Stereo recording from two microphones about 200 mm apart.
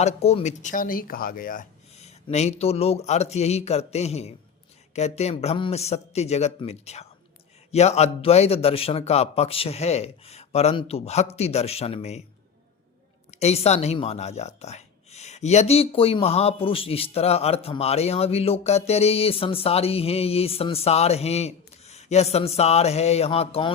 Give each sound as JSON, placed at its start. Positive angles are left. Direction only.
{"t": 0.0, "sound": "speech", "side_deg": 30}
{"t": 13.3, "sound": "speech", "side_deg": 30}